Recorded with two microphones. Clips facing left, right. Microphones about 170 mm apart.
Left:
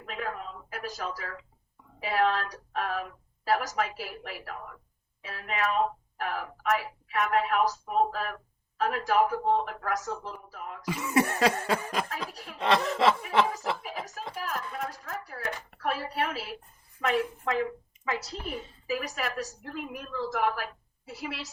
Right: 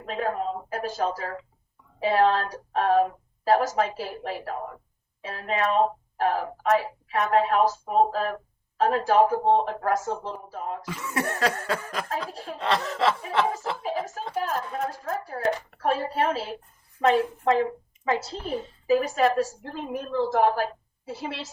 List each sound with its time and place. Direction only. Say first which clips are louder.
0.0 s a sound: right 8 dB; 30° right (ahead or behind)
2.0 s a woman's voice: right 6 dB; 30° right (ahead or behind)
10.8 s cough: left 7 dB; 10° left (ahead or behind)
12.1 s a woman's voice: right 6 dB; 30° right (ahead or behind)
12.5 s cough: left 1 dB; 15° left (ahead or behind)
13.5 s a woman's voice: right 4 dB; 25° right (ahead or behind)